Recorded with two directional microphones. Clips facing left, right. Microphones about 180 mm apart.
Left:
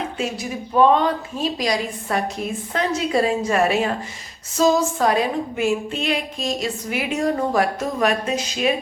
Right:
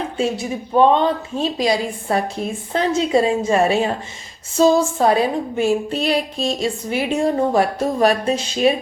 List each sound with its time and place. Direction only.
0.2 s a woman's voice: 25° right (ahead or behind)